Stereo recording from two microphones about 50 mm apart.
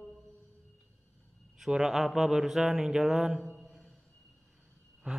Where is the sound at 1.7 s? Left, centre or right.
Centre.